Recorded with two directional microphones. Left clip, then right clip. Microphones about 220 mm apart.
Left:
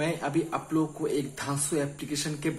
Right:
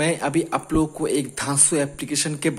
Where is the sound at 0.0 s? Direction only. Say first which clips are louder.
Right 7 dB; 40° right (ahead or behind).